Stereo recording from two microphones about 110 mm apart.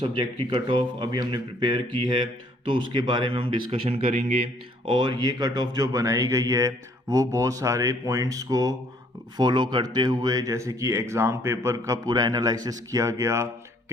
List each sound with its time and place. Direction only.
0.0 s speech: 50° right (ahead or behind); by 4.4 s 85° right
4.9 s speech: 40° right (ahead or behind); by 13.5 s 25° right (ahead or behind)